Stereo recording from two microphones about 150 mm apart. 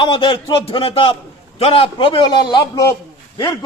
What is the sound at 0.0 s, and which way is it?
A man's voice, 35° left (ahead or behind).